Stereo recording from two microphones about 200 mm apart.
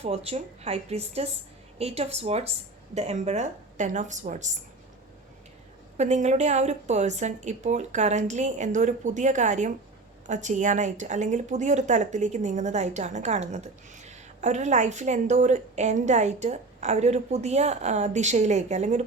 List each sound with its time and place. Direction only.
0.0 s a woman's voice: 30° right (ahead or behind)
6.0 s a woman's voice: 35° right (ahead or behind)